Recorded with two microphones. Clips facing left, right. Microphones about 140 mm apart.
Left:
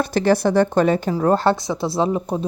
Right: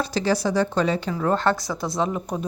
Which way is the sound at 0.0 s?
55° left (ahead or behind).